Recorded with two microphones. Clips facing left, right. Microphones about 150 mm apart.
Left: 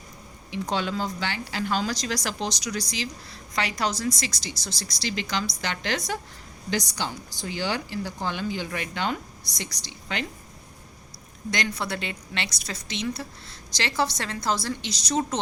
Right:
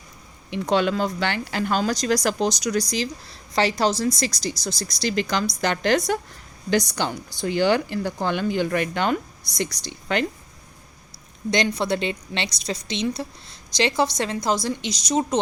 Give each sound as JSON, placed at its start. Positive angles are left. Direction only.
{"t": 0.5, "sound": "a woman's voice", "side_deg": -65}
{"t": 11.5, "sound": "a woman's voice", "side_deg": -20}